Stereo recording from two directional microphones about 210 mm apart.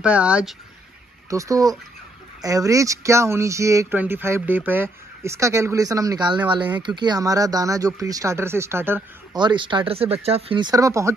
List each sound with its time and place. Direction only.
0.0 s speech: 5° right (ahead or behind)
1.3 s speech: 15° right (ahead or behind)
9.4 s speech: 20° right (ahead or behind)